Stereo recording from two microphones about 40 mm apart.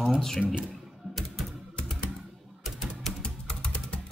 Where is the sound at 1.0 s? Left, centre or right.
Right.